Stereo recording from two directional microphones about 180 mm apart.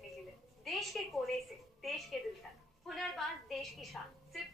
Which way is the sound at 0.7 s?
Centre (ahead or behind).